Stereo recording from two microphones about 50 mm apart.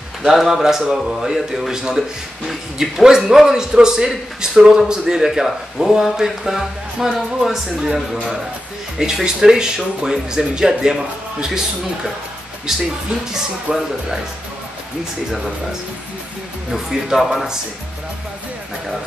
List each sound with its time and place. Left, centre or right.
0.2 s a man's voice: centre
13.7 s speech: right
16.7 s a man's voice: centre